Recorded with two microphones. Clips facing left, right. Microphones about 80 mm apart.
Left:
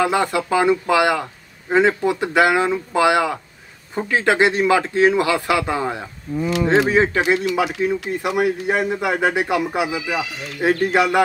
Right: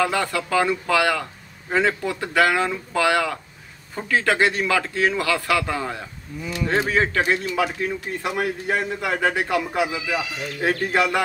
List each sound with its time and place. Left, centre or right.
0.0 s a man's voice: left